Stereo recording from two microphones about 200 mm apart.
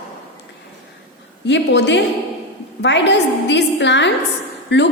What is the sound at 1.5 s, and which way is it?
A woman's voice, 60° left (ahead or behind).